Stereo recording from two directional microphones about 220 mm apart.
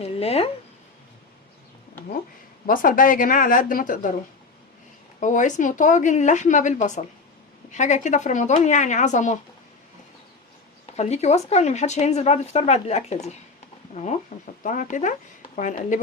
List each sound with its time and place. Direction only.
0.0 s speech: 25° left (ahead or behind)
2.6 s speech: 40° left (ahead or behind)
5.2 s speech: 35° left (ahead or behind)
10.9 s speech: 30° left (ahead or behind)